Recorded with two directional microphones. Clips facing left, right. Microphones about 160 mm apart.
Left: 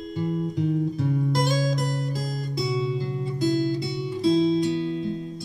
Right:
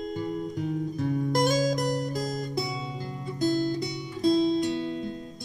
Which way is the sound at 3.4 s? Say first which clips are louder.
Left 2 dB; 45° right (ahead or behind).